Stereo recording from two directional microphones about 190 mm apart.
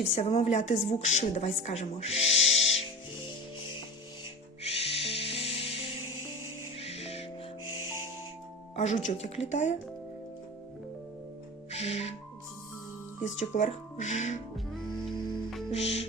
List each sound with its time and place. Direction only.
0.0 s a woman's voice: 35° left (ahead or behind)
4.6 s music: 30° left (ahead or behind)
8.7 s a woman's voice: 35° left (ahead or behind)
11.7 s music: 35° left (ahead or behind)
13.2 s a woman's voice: 40° left (ahead or behind)
14.5 s music: centre (ahead or behind)
15.7 s a woman's voice: 35° left (ahead or behind)